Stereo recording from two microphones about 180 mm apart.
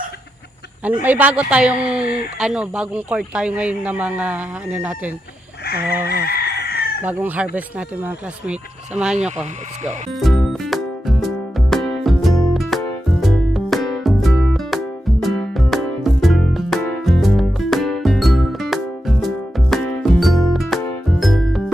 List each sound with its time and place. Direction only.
1.0 s a man's voice: 10° right (ahead or behind)
6.2 s chicken: 60° left (ahead or behind)
7.0 s a man's voice: 10° right (ahead or behind)
10.2 s music: centre (ahead or behind)